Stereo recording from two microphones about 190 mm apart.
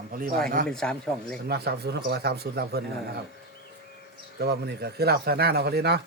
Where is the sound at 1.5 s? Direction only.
55° right (ahead or behind).